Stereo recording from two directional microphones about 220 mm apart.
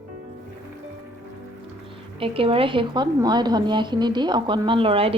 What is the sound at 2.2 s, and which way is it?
Speech, 25° right (ahead or behind).